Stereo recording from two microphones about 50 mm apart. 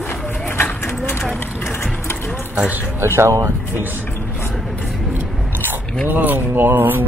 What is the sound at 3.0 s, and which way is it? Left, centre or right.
Speech, right.